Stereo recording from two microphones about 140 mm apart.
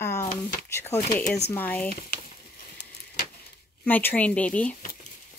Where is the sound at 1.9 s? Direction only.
90° left.